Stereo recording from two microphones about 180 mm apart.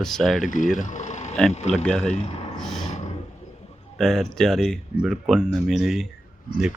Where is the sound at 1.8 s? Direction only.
5° left (ahead or behind).